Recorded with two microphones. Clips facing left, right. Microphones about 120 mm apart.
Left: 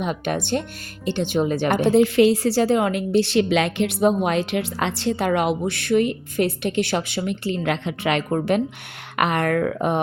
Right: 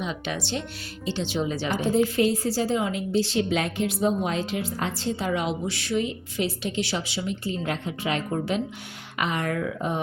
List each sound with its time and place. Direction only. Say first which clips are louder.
0.0 s a woman's voice: left 6 dB; 55° left (ahead or behind)